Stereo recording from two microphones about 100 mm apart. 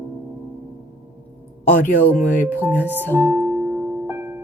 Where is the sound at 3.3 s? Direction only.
35° right (ahead or behind).